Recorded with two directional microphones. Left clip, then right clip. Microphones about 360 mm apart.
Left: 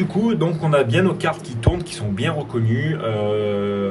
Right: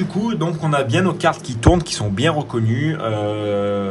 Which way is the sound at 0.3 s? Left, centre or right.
Centre.